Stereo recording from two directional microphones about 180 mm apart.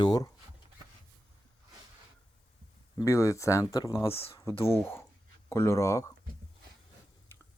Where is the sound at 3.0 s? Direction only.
15° left (ahead or behind).